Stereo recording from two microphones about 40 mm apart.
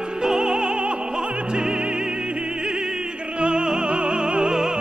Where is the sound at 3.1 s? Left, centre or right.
Right.